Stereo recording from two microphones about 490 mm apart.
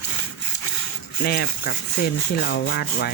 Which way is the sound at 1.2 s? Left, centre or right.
Centre.